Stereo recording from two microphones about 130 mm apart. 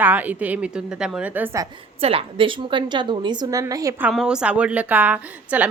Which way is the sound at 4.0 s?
5° right (ahead or behind).